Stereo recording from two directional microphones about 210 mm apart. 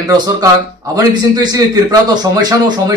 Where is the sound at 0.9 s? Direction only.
20° right (ahead or behind).